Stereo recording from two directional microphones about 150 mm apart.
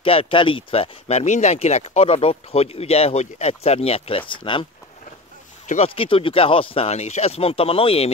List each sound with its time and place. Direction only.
0.0 s speech: 35° left (ahead or behind)
5.9 s speech: 35° left (ahead or behind)